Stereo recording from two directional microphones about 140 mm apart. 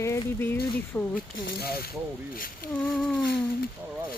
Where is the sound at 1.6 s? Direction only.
90° left.